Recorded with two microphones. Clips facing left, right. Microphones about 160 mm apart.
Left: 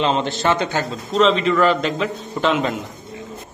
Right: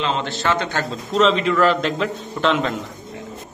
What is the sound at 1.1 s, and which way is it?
A man's voice, centre (ahead or behind).